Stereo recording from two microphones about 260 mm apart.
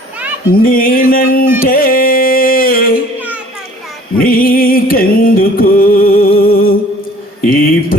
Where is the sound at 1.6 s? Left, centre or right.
Left.